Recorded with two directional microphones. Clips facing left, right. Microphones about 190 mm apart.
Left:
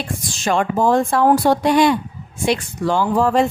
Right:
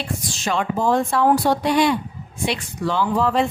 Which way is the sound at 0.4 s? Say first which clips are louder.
Left 4 dB; 50° left (ahead or behind).